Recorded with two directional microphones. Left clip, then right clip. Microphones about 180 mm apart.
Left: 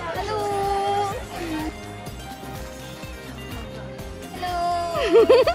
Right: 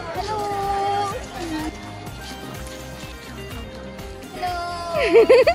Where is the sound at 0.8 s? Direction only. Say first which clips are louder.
Right 1 dB; 15° left (ahead or behind).